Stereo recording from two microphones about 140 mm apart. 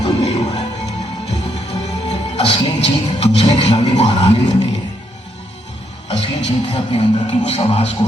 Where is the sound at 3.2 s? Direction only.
50° left (ahead or behind).